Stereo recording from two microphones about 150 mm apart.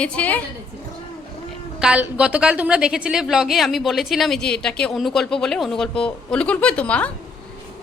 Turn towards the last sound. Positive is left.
turn(degrees=10)  # may be behind; listen again after turning